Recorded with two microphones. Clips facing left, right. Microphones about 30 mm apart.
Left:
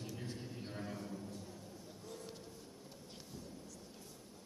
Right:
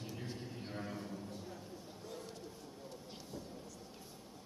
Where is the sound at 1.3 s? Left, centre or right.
Right.